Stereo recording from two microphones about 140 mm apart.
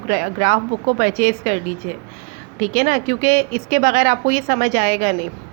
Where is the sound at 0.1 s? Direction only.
70° right (ahead or behind).